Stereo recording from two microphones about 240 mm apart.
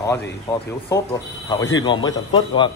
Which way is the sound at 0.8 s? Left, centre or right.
Centre.